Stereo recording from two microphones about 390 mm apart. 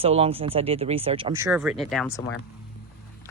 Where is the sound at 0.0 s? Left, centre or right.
Centre.